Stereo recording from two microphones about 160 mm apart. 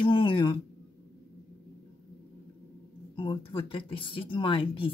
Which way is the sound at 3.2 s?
30° left (ahead or behind).